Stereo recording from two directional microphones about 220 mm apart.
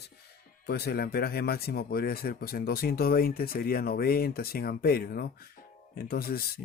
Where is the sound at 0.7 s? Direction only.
45° left (ahead or behind).